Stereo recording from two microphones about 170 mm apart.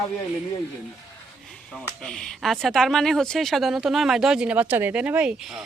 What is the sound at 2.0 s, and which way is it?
A woman's voice, 5° left (ahead or behind).